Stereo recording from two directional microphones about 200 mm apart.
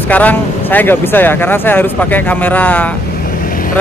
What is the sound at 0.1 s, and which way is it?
Speech, 10° left (ahead or behind).